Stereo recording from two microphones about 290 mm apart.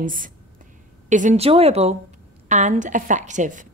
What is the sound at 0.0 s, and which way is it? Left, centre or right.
A woman's voice, right.